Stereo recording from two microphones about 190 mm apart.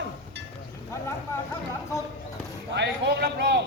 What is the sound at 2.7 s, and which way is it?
Speech, 60° right (ahead or behind).